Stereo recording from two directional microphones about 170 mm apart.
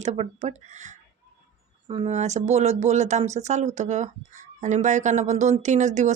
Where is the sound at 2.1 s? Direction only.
40° right (ahead or behind).